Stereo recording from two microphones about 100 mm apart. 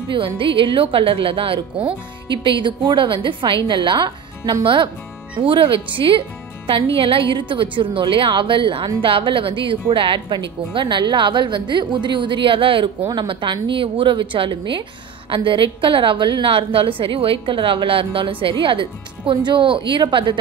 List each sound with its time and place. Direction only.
0.1 s a woman's voice: 60° right (ahead or behind)